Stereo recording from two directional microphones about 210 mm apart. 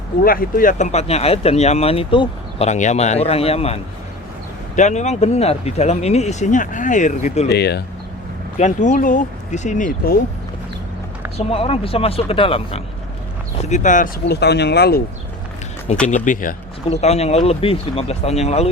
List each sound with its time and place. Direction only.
0.3 s speech: 45° left (ahead or behind)
4.8 s speech: 35° left (ahead or behind)
7.4 s speech: 50° left (ahead or behind)
8.5 s speech: 35° left (ahead or behind)
11.3 s speech: 25° left (ahead or behind); by 15.0 s 50° left (ahead or behind)
16.0 s speech: 35° left (ahead or behind)